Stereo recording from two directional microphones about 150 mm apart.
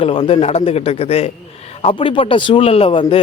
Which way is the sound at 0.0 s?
35° left (ahead or behind).